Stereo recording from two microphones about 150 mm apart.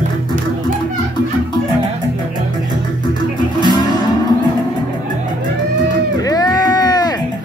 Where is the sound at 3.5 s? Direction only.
30° left (ahead or behind).